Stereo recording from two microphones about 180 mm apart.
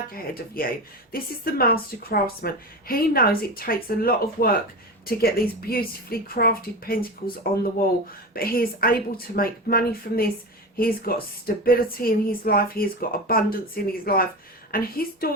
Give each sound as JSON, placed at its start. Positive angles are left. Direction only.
{"t": 0.1, "sound": "speech", "side_deg": 55}
{"t": 8.3, "sound": "speech", "side_deg": 55}